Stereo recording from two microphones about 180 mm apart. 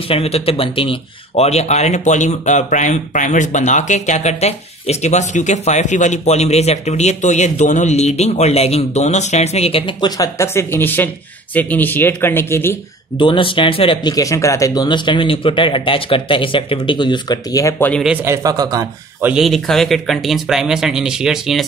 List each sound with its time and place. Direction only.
0.1 s speech: 35° left (ahead or behind); by 12.7 s 15° left (ahead or behind)
13.2 s speech: 30° left (ahead or behind); by 18.0 s 10° left (ahead or behind)
18.0 s speech: 10° right (ahead or behind)
19.2 s speech: centre (ahead or behind)